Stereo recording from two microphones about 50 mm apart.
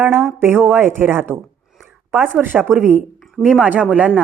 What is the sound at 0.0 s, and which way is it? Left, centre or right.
Speech, right.